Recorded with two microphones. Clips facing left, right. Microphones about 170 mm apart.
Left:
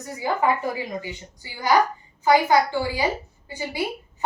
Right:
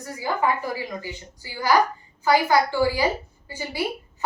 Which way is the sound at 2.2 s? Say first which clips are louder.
Left 1 dB; 20° left (ahead or behind).